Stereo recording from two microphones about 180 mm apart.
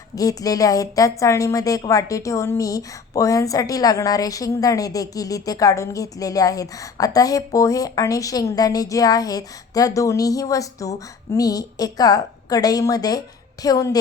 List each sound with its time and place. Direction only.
0.2 s a woman's voice: 20° left (ahead or behind)